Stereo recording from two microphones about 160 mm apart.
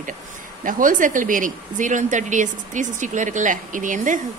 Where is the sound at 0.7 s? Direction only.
55° right (ahead or behind).